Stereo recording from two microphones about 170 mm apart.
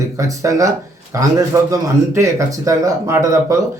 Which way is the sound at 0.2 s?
20° right (ahead or behind).